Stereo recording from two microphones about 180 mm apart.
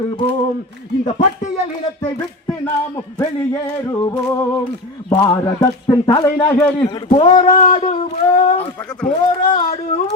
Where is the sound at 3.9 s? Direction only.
20° left (ahead or behind).